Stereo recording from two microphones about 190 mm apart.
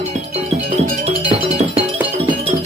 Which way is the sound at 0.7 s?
35° right (ahead or behind).